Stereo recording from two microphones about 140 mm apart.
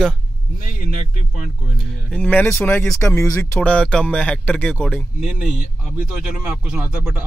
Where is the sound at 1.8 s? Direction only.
5° left (ahead or behind); by 3.6 s 20° left (ahead or behind).